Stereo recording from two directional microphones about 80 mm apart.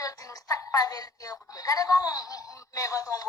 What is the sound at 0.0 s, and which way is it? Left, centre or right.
A woman's voice, left.